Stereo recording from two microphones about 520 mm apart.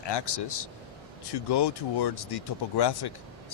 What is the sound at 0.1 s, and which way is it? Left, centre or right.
Speech, left.